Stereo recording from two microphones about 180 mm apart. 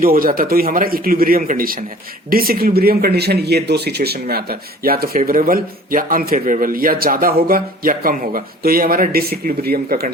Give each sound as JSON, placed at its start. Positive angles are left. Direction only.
{"t": 0.0, "sound": "speech", "side_deg": -55}